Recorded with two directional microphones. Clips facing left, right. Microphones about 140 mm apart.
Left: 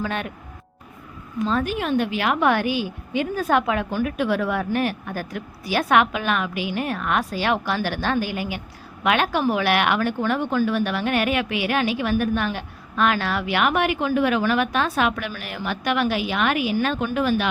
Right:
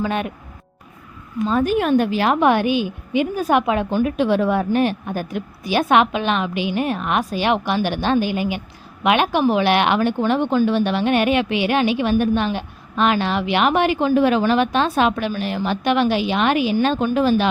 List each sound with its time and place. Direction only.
0.0 s speech: 20° right (ahead or behind)
1.6 s speech: 50° right (ahead or behind); by 17.5 s 30° right (ahead or behind)